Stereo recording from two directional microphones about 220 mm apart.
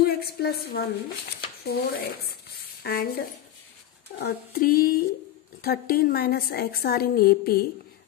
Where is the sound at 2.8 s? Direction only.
45° left (ahead or behind).